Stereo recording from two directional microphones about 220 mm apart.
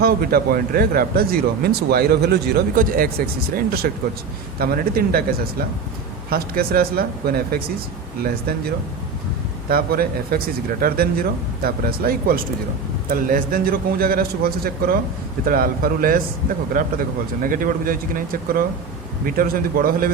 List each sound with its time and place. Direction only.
0.0 s speech: 45° right (ahead or behind)
6.3 s speech: 45° right (ahead or behind)
9.6 s speech: 45° right (ahead or behind)